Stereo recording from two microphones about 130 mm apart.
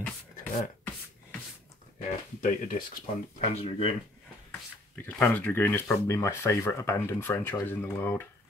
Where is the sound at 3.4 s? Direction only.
50° left (ahead or behind).